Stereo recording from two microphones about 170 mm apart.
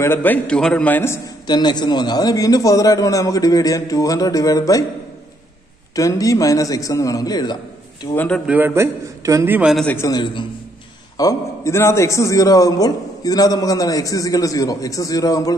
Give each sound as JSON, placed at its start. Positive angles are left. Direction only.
{"t": 0.0, "sound": "a man's voice", "side_deg": 10}
{"t": 5.9, "sound": "a man's voice", "side_deg": 20}
{"t": 8.1, "sound": "a man's voice", "side_deg": 10}
{"t": 8.5, "sound": "a man's voice", "side_deg": -10}
{"t": 9.8, "sound": "a man's voice", "side_deg": 15}